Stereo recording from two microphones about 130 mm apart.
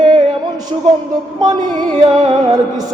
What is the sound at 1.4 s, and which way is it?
Speech, 35° right (ahead or behind).